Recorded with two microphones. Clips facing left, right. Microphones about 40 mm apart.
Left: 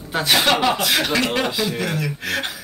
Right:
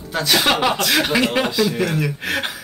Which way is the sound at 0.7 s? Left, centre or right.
Centre.